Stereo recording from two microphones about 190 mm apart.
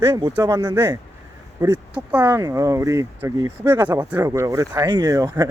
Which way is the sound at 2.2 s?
15° right (ahead or behind).